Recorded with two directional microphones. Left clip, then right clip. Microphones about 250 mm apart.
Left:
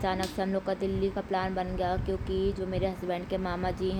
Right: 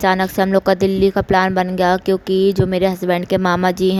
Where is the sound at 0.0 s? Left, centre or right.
Right.